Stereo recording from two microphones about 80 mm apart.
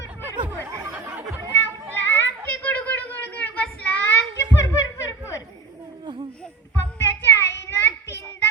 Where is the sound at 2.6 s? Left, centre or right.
Centre.